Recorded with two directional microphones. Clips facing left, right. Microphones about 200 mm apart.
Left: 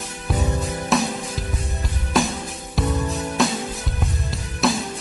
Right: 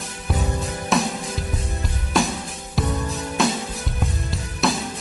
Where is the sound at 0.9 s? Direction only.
Centre (ahead or behind).